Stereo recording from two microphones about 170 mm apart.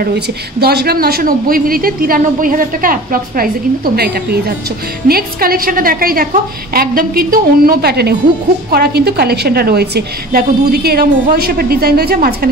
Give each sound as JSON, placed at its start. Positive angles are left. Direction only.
{"t": 0.0, "sound": "a woman's voice", "side_deg": -65}